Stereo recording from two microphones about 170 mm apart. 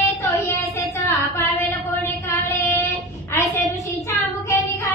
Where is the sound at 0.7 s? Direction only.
15° left (ahead or behind).